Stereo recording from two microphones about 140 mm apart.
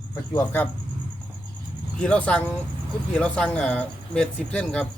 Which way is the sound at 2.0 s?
10° left (ahead or behind).